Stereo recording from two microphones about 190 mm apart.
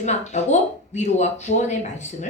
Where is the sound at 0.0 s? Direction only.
40° left (ahead or behind).